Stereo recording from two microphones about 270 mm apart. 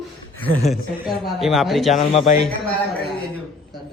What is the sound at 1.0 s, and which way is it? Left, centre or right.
Speech, centre.